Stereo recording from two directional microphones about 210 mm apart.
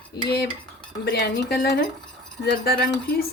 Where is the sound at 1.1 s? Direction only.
50° left (ahead or behind).